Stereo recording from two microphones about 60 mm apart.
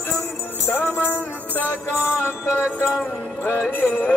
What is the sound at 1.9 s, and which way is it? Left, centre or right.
Music, left.